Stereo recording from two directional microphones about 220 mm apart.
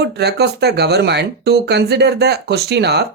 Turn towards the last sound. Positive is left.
turn(degrees=-50)  # may be behind; listen again after turning